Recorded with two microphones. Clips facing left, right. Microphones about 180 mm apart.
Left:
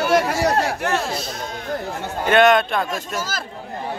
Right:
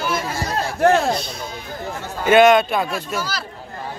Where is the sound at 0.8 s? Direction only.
55° right (ahead or behind).